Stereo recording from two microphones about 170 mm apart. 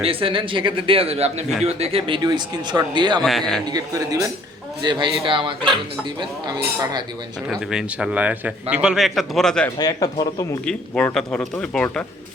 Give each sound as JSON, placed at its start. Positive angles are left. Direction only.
{"t": 0.0, "sound": "a man's voice", "side_deg": -35}
{"t": 3.2, "sound": "speech", "side_deg": 0}
{"t": 3.7, "sound": "speech", "side_deg": -20}
{"t": 7.5, "sound": "speech", "side_deg": -5}
{"t": 9.6, "sound": "speech", "side_deg": 20}
{"t": 10.7, "sound": "speech", "side_deg": 5}